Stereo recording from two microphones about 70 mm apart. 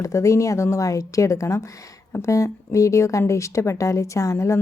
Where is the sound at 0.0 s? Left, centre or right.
Left.